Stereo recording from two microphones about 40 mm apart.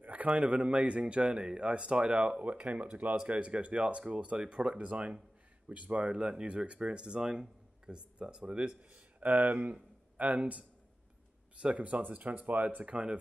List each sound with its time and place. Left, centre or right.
0.0 s speech: right
9.2 s a man's voice: right
11.6 s speech: right
12.8 s speech: right